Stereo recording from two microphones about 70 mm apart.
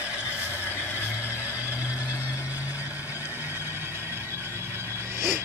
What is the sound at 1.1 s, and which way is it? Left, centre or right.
Vehicle, right.